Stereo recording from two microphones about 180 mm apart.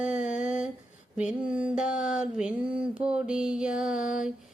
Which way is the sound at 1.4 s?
5° right (ahead or behind).